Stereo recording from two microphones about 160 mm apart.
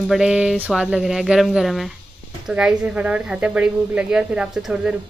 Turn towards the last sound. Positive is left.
turn(degrees=-5)  # may be behind; listen again after turning